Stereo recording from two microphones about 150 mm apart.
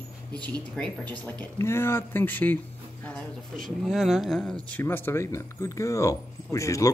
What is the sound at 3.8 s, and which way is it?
Speech, centre (ahead or behind).